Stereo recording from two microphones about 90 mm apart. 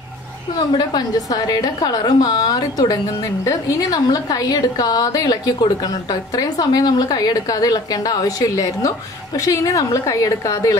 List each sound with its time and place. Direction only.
0.6 s a woman's voice: 50° left (ahead or behind)